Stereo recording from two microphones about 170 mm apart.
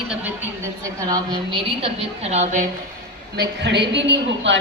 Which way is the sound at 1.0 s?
20° right (ahead or behind).